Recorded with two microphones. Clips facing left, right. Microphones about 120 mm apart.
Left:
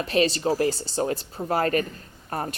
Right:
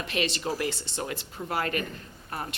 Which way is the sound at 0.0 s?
35° left (ahead or behind).